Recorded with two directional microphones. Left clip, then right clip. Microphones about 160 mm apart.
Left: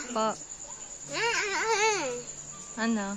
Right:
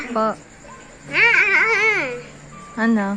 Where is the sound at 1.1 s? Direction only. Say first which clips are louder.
Right 14 dB; 50° left (ahead or behind).